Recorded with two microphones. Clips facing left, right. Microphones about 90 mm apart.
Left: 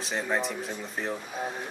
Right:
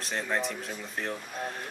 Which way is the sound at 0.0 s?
5° left (ahead or behind).